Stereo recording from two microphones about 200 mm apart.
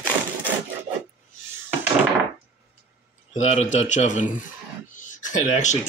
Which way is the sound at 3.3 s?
35° left (ahead or behind).